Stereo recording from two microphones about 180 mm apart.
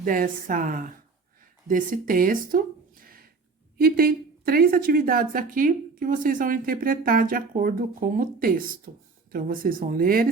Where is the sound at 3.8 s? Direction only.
55° right (ahead or behind).